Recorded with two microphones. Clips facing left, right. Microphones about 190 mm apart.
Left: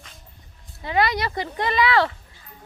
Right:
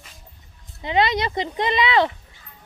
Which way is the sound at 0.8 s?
20° right (ahead or behind).